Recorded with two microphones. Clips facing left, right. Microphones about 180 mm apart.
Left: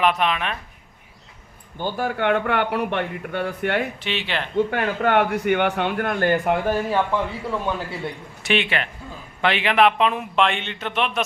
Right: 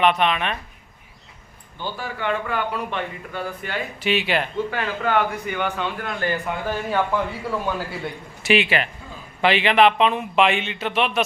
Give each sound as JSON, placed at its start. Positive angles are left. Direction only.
{"t": 0.0, "sound": "speech", "side_deg": 0}
{"t": 1.8, "sound": "a man's voice", "side_deg": 50}
{"t": 4.0, "sound": "speech", "side_deg": -10}
{"t": 4.5, "sound": "a man's voice", "side_deg": 60}
{"t": 7.5, "sound": "speech", "side_deg": -5}